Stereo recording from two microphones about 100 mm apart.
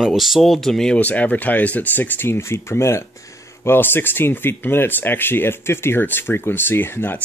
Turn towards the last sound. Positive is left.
turn(degrees=20)  # may be behind; listen again after turning